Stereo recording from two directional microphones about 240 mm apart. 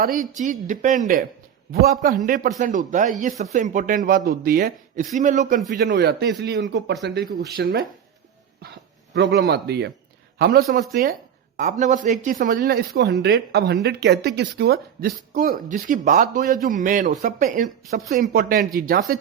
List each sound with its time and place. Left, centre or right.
0.0 s speech: right
9.1 s a man's voice: right